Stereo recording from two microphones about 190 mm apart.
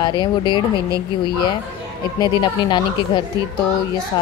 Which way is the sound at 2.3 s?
25° left (ahead or behind).